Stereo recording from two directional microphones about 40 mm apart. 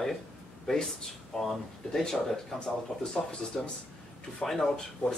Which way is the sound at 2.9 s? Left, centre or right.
Centre.